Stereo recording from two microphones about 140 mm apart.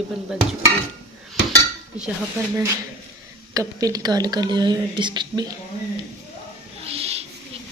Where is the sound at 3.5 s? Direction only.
25° right (ahead or behind).